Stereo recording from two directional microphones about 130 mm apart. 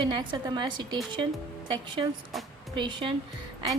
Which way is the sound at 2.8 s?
40° right (ahead or behind).